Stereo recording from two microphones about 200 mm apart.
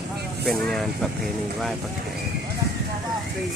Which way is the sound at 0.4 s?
Centre (ahead or behind).